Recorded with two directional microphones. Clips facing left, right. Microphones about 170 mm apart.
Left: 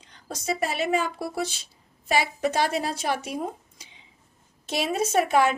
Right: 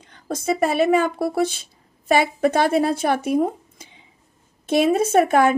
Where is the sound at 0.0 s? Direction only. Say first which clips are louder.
Right 8 dB; 55° right (ahead or behind).